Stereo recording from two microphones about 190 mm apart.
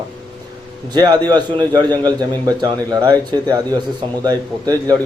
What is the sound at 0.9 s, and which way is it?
A man's voice, 20° right (ahead or behind).